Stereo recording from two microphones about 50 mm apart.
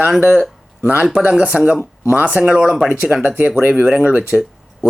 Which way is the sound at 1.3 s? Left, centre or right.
Right.